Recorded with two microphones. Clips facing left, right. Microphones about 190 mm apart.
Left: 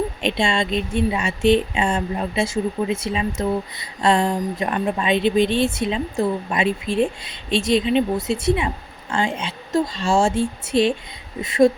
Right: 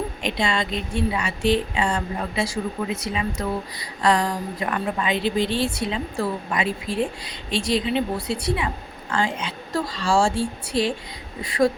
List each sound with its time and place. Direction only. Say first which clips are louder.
0.2 s a woman's voice: left 2 dB; 25° left (ahead or behind)